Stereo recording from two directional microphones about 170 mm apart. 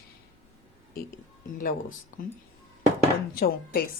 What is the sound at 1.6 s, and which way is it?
Speech, 55° left (ahead or behind).